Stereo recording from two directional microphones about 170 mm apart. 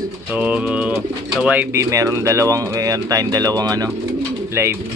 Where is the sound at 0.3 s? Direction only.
10° right (ahead or behind).